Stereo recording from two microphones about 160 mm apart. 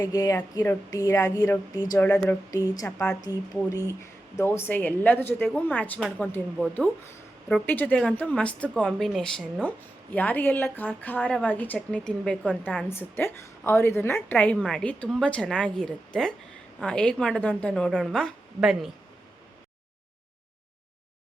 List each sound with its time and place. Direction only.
0.0 s speech: 20° left (ahead or behind)
7.4 s speech: 10° left (ahead or behind)
9.6 s a woman's voice: 10° left (ahead or behind)